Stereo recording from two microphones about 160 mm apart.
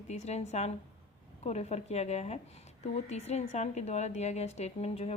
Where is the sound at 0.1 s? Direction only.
45° left (ahead or behind).